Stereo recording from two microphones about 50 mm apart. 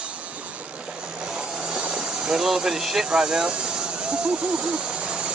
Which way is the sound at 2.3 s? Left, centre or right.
Centre.